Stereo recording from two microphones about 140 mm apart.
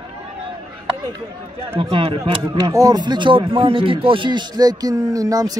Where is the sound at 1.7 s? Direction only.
40° right (ahead or behind).